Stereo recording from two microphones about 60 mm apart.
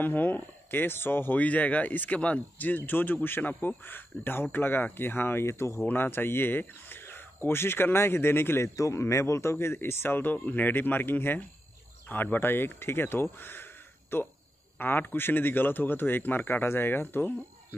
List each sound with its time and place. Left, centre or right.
0.0 s speech: left
1.4 s speech: left
5.9 s speech: left
8.7 s speech: left
9.0 s speech: left